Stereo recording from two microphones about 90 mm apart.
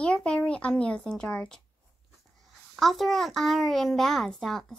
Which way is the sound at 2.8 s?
Centre (ahead or behind).